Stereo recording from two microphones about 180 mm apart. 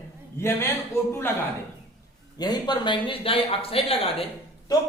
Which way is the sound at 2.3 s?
20° left (ahead or behind).